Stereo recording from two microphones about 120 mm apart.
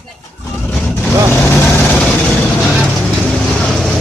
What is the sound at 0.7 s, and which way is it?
Vehicle, 10° left (ahead or behind).